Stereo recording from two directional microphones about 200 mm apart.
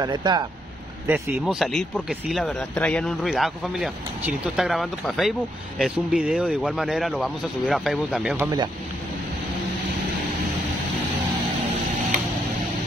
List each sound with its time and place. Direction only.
0.0 s speech: 20° right (ahead or behind); by 8.5 s 5° right (ahead or behind)